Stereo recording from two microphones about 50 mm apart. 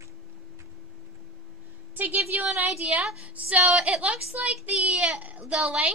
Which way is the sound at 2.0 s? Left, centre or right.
Right.